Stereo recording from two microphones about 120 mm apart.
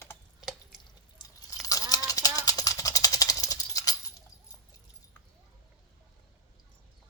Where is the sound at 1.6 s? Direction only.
30° left (ahead or behind).